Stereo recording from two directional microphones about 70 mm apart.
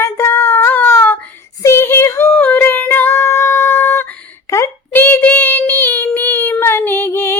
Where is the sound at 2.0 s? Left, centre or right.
Left.